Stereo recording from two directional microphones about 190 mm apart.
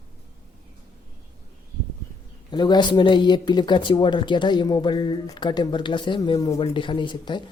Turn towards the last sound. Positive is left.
turn(degrees=25)  # may be behind; listen again after turning